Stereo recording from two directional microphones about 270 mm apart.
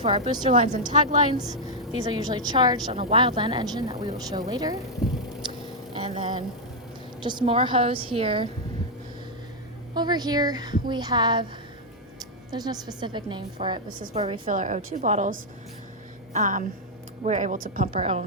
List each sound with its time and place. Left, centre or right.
0.0 s a woman's voice: centre
0.5 s a woman's voice: right
0.9 s a woman's voice: centre
5.4 s a sound: centre
5.9 s vehicle: right
7.2 s a woman's voice: centre
9.9 s a woman's voice: centre